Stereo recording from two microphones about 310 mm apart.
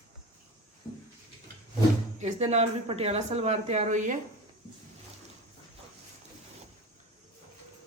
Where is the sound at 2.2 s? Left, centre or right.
Right.